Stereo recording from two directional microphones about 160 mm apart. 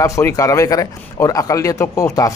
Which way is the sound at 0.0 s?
20° left (ahead or behind).